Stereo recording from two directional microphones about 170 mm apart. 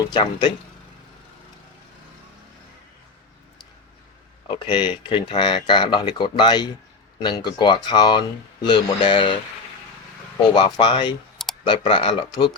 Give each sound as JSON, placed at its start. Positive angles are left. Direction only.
{"t": 0.0, "sound": "speech", "side_deg": 25}
{"t": 4.4, "sound": "speech", "side_deg": 30}
{"t": 10.5, "sound": "speech", "side_deg": 25}